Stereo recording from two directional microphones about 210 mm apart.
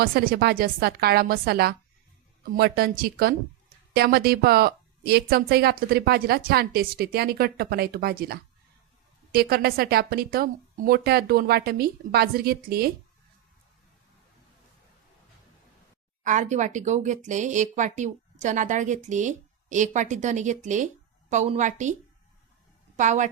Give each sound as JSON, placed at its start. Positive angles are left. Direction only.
{"t": 0.0, "sound": "speech", "side_deg": -45}
{"t": 16.2, "sound": "speech", "side_deg": -35}
{"t": 23.0, "sound": "speech", "side_deg": -35}